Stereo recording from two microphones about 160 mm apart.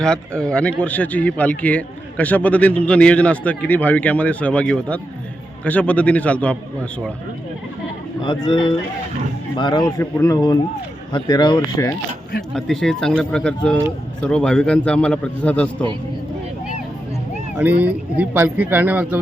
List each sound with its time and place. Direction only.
0.0 s a man's voice: 5° left (ahead or behind)
8.2 s speech: 30° left (ahead or behind)
10.0 s speech: 15° left (ahead or behind)
12.5 s a man's voice: centre (ahead or behind)
17.6 s speech: 10° right (ahead or behind)